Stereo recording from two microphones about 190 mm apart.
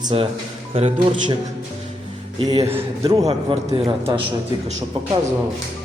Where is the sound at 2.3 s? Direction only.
30° right (ahead or behind).